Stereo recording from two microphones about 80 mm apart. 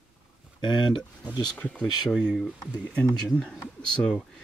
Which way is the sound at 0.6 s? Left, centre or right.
Left.